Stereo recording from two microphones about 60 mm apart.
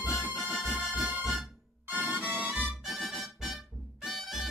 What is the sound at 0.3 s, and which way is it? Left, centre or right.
Music, centre.